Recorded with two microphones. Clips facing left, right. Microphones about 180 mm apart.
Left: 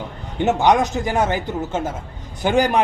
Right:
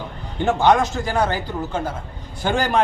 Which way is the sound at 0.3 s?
15° left (ahead or behind).